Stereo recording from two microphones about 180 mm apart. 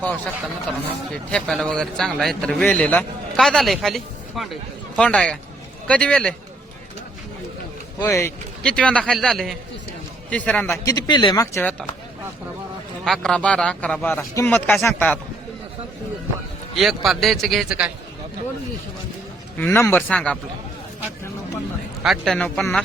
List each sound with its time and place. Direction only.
1.3 s a man's voice: 5° left (ahead or behind)
7.9 s a man's voice: 15° left (ahead or behind)
10.8 s speech: 20° left (ahead or behind)
13.1 s a man's voice: 5° left (ahead or behind)
16.7 s a man's voice: centre (ahead or behind)
19.5 s a man's voice: 15° left (ahead or behind)
22.0 s a man's voice: centre (ahead or behind)